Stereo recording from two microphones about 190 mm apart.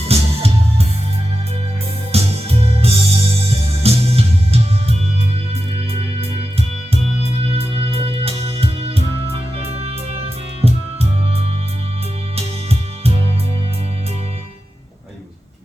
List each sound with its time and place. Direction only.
0.1 s music: 30° right (ahead or behind)
2.1 s music: 30° right (ahead or behind)
6.1 s music: 30° right (ahead or behind)